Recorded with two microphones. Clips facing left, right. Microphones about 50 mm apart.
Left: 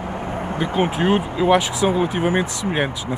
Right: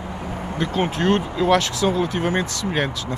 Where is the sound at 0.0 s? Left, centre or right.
Left.